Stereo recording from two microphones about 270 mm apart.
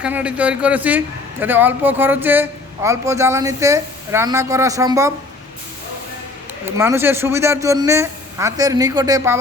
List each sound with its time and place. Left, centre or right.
0.0 s a man's voice: centre
6.7 s a man's voice: centre